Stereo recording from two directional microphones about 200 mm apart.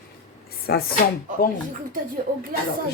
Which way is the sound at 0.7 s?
55° left (ahead or behind).